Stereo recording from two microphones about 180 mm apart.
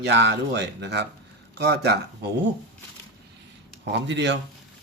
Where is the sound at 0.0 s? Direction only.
70° right (ahead or behind).